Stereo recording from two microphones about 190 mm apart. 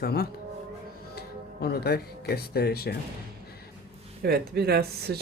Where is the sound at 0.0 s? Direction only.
55° left (ahead or behind).